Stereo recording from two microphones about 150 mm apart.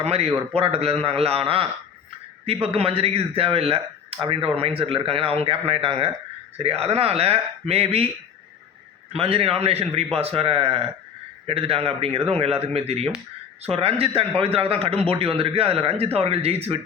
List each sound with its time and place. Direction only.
0.0 s speech: 45° right (ahead or behind)
9.1 s speech: 40° right (ahead or behind)